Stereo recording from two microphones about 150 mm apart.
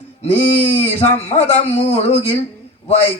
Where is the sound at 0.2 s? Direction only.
45° left (ahead or behind).